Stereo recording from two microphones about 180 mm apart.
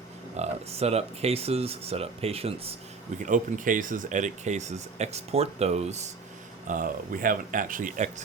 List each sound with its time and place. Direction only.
0.3 s speech: 35° right (ahead or behind)
3.2 s speech: 45° right (ahead or behind)
6.7 s speech: 50° right (ahead or behind)